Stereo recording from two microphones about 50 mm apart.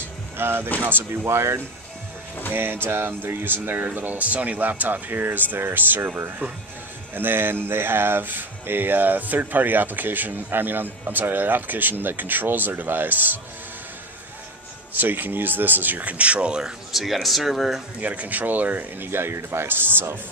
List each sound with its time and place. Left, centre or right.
0.4 s a sound: right
0.7 s speech: right
1.2 s speech: right
2.5 s speech: right
15.0 s speech: right; by 16.7 s centre
16.9 s speech: centre
18.0 s speech: right
19.0 s speech: right